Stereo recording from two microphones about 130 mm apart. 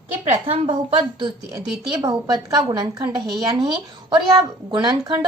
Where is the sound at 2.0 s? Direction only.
30° right (ahead or behind).